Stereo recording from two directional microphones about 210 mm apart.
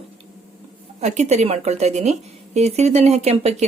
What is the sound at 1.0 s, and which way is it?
Speech, 35° right (ahead or behind).